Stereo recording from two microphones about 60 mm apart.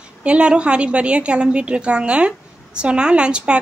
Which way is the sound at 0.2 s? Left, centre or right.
Centre.